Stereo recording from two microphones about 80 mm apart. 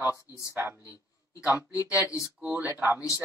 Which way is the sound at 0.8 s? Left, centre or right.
Left.